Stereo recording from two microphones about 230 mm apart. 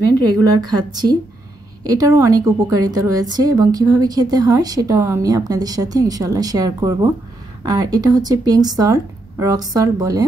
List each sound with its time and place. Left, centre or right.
0.4 s a woman's voice: centre